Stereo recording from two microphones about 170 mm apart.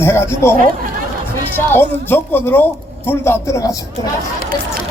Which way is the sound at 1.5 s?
15° left (ahead or behind).